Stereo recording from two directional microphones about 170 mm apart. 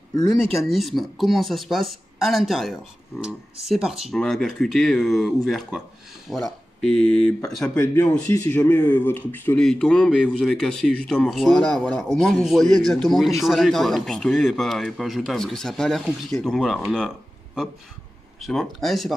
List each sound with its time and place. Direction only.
0.5 s speech: centre (ahead or behind)
18.4 s speech: centre (ahead or behind)